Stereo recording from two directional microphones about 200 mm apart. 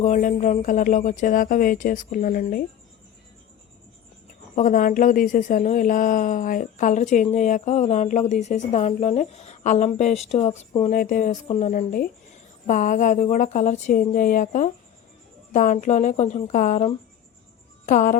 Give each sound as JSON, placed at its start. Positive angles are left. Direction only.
{"t": 0.0, "sound": "a woman's voice", "side_deg": 40}
{"t": 4.5, "sound": "a woman's voice", "side_deg": 40}